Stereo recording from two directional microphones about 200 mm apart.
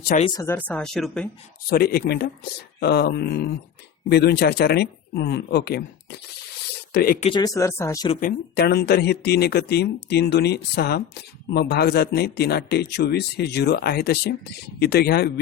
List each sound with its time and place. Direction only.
0.2 s speech: 25° left (ahead or behind)
0.4 s speech: 10° left (ahead or behind)
1.7 s speech: 50° left (ahead or behind)
7.3 s speech: 20° left (ahead or behind)
8.2 s speech: 50° left (ahead or behind)